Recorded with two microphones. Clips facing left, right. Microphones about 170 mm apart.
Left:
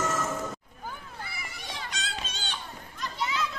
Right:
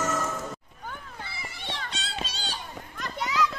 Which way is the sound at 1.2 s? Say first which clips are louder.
Right 3 dB; 25° right (ahead or behind).